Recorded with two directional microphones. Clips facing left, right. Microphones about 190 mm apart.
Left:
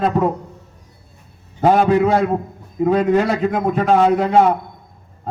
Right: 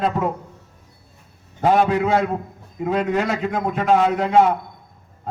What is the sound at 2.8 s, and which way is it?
A man's voice, 40° left (ahead or behind).